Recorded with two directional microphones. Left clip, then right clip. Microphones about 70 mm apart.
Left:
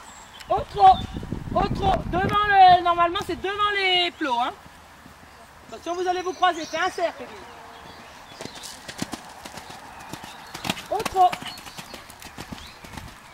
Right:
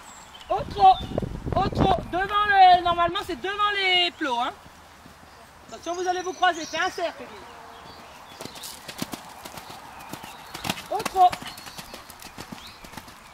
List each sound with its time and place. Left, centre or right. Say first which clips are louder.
0.5 s a sound: left 2 dB; right
1.6 s speech: even; right
5.7 s speech: left 1 dB; right
8.4 s clip-clop: left 1 dB; left; by 10.6 s centre
10.6 s clip-clop: left 2 dB; centre